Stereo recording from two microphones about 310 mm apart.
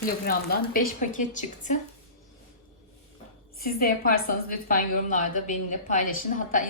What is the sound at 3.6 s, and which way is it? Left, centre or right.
A woman's voice, left.